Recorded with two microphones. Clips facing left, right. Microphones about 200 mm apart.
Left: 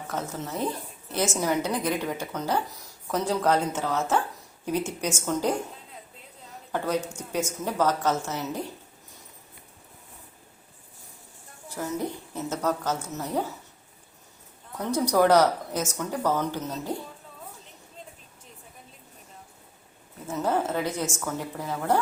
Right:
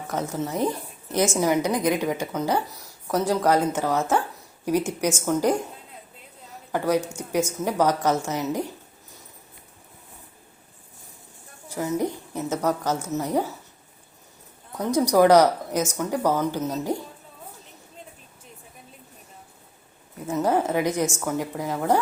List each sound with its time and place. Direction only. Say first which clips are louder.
0.1 s a woman's voice: right 5 dB; 15° right (ahead or behind)
6.7 s a woman's voice: right 4 dB; 10° right (ahead or behind)
11.7 s a woman's voice: right 5 dB; 10° right (ahead or behind)
15.1 s a woman's voice: right 4 dB; 15° right (ahead or behind)
20.2 s a woman's voice: right 4 dB; 10° right (ahead or behind)